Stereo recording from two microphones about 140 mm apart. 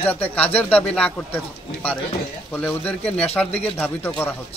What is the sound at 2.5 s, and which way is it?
Speech, 10° left (ahead or behind).